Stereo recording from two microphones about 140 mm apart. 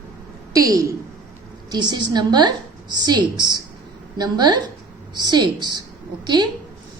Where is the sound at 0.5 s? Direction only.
25° right (ahead or behind).